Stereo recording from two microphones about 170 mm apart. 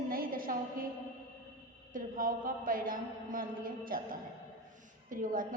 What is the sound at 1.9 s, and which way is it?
A woman's voice, 55° right (ahead or behind).